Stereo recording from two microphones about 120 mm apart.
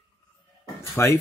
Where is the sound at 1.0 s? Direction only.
25° left (ahead or behind).